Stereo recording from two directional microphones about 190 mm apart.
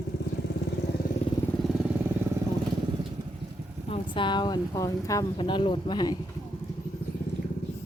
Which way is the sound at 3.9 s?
25° left (ahead or behind).